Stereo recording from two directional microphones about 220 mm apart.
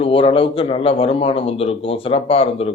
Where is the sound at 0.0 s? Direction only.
25° left (ahead or behind).